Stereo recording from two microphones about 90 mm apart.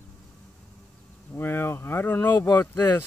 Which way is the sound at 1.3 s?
25° left (ahead or behind).